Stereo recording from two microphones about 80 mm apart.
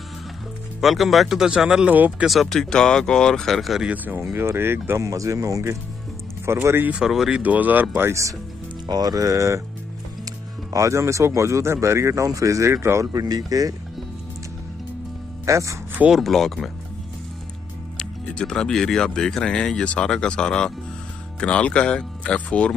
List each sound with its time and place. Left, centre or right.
0.7 s speech: centre
1.9 s speech: centre
2.2 s speech: centre
3.8 s speech: right
4.2 s speech: right
7.1 s speech: centre
7.3 s speech: centre
8.1 s speech: right
8.8 s speech: right
10.7 s speech: right
13.1 s speech: right
15.4 s speech: right
16.1 s speech: centre
17.9 s speech: centre